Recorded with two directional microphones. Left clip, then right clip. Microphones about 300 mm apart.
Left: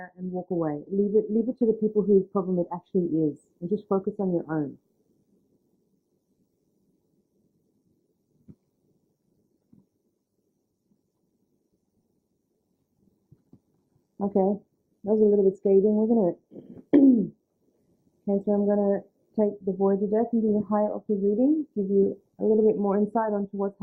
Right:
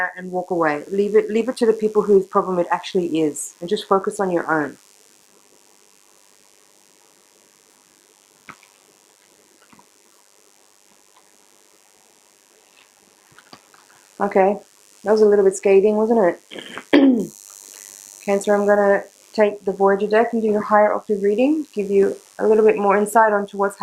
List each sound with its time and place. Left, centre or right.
0.0 s speech: centre
0.3 s speech: right
0.6 s speech: centre
1.5 s speech: centre
3.8 s speech: centre
8.5 s a sound: centre
14.2 s speech: centre
18.3 s speech: centre
21.3 s speech: right
22.0 s speech: centre